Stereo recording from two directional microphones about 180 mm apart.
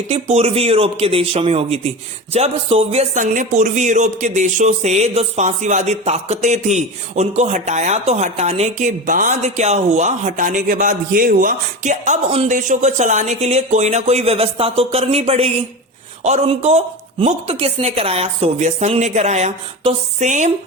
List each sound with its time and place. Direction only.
0.1 s a man's voice: 35° right (ahead or behind)